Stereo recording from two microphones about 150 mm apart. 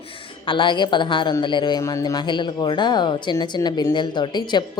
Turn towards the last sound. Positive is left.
turn(degrees=30)  # may be behind; listen again after turning